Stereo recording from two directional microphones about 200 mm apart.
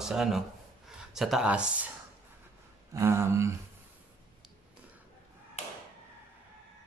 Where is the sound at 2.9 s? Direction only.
15° right (ahead or behind).